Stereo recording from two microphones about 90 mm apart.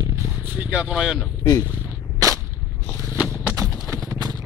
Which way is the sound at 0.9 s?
5° right (ahead or behind).